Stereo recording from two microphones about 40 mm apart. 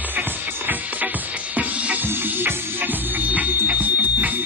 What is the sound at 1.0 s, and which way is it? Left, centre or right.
Music, right.